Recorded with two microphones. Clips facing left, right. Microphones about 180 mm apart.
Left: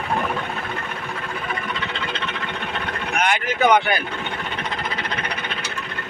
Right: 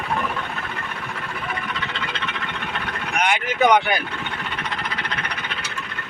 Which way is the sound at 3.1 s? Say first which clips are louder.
Right 1 dB; 10° right (ahead or behind).